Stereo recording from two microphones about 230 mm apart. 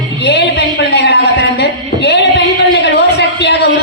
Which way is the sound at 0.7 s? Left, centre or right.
Left.